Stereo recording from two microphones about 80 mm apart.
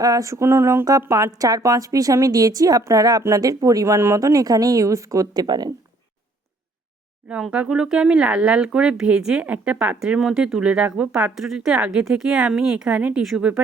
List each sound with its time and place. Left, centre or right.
0.0 s speech: right
7.5 s speech: centre
10.0 s speech: centre